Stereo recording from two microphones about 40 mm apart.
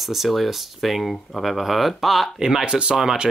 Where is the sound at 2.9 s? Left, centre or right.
Centre.